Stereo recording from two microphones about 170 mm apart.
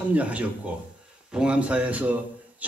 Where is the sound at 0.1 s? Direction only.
10° right (ahead or behind).